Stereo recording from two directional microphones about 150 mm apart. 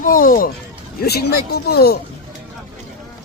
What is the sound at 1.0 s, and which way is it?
Speech, 90° left.